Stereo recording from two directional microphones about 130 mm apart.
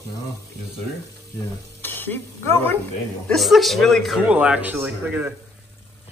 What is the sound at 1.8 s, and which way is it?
Speech, 15° left (ahead or behind).